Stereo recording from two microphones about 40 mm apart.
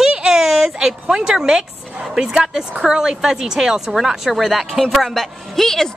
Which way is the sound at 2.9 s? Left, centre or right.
Centre.